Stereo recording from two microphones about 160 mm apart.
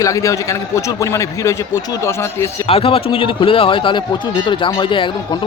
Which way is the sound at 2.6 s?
35° left (ahead or behind).